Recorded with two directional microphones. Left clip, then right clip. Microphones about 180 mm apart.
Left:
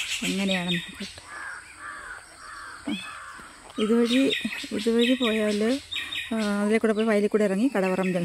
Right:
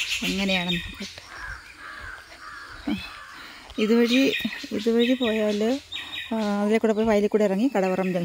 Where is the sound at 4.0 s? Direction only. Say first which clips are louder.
Right 2 dB; centre (ahead or behind).